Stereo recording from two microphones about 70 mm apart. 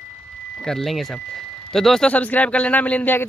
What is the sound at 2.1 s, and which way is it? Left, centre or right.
Speech, left.